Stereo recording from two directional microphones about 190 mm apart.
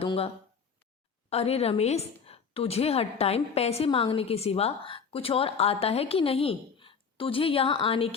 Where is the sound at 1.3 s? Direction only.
35° left (ahead or behind).